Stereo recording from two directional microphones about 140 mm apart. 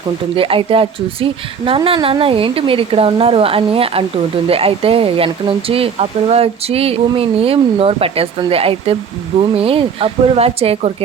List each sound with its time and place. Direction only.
0.3 s speech: 40° right (ahead or behind)